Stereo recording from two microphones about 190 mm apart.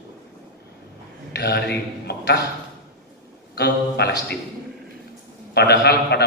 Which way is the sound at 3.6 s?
60° left (ahead or behind).